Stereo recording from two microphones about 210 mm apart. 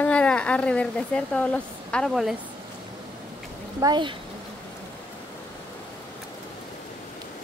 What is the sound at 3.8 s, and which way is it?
Speech, 20° right (ahead or behind).